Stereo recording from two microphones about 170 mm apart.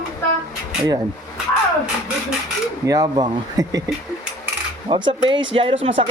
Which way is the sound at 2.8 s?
25° right (ahead or behind).